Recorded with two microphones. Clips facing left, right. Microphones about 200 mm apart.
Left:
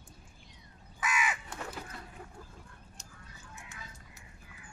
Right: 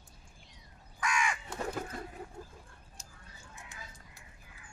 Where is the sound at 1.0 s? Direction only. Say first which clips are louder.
Right 1 dB; 5° left (ahead or behind).